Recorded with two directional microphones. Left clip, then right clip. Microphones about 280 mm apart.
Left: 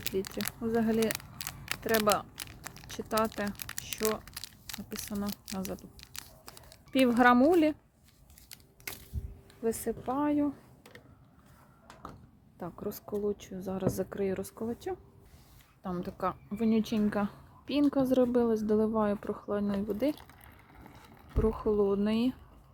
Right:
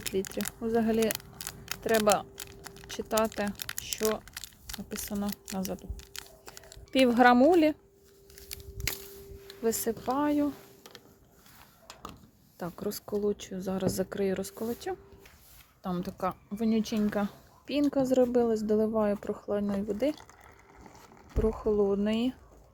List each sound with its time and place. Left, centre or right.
0.3 s speech: centre
0.6 s speech: centre
0.9 s a sound: centre
1.9 s speech: centre
2.3 s a sound: centre
2.9 s speech: centre
3.6 s crumpling: centre
7.0 s speech: centre
9.5 s speech: centre
12.5 s speech: centre
21.3 s speech: centre